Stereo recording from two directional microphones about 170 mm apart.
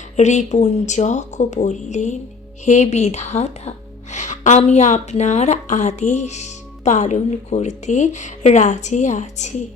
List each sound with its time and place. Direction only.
0.2 s speech: 45° left (ahead or behind)